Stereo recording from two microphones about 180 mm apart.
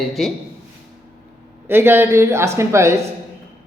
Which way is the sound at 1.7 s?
10° right (ahead or behind).